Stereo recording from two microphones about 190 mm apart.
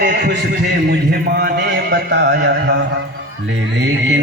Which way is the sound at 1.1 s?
55° right (ahead or behind).